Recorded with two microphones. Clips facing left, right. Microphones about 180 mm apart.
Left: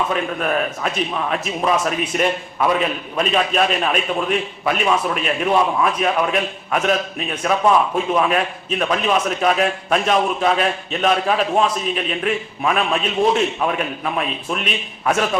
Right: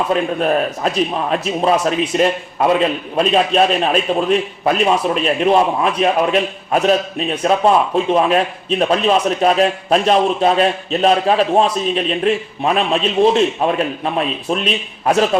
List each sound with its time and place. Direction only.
0.1 s a man's voice: 30° right (ahead or behind)